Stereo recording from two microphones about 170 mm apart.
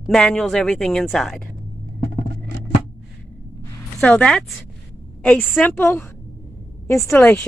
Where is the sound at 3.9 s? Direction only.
5° left (ahead or behind).